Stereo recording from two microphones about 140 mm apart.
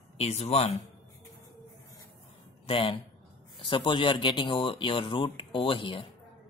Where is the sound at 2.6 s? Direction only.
40° left (ahead or behind).